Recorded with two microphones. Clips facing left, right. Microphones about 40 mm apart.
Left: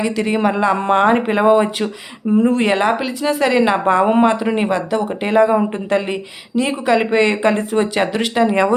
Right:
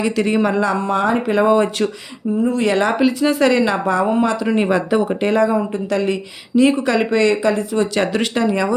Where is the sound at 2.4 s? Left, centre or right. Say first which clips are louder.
Left 2 dB; left.